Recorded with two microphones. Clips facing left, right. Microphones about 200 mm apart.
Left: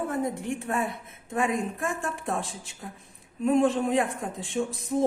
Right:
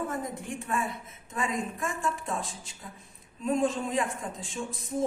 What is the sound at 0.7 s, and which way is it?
A woman's voice, 55° left (ahead or behind).